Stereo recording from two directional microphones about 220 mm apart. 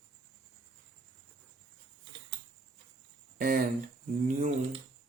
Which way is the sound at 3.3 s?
40° right (ahead or behind).